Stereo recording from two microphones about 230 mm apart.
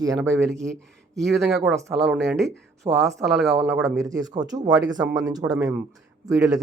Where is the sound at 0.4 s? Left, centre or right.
Centre.